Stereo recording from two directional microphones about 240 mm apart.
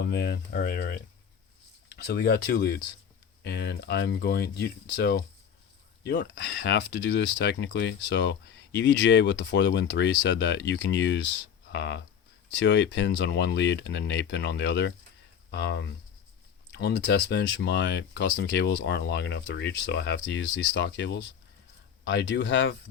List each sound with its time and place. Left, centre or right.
0.0 s speech: left
2.0 s speech: left